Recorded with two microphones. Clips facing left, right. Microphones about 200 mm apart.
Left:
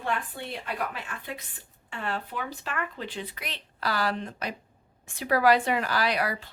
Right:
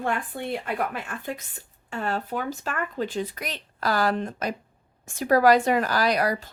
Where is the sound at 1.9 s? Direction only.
45° right (ahead or behind).